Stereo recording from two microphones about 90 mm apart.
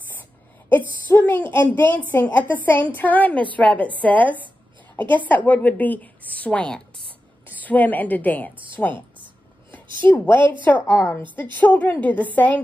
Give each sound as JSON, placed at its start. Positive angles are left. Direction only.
{"t": 0.7, "sound": "a woman's voice", "side_deg": 20}